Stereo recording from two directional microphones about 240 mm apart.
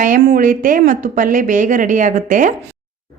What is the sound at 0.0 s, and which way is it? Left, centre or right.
A woman's voice, right.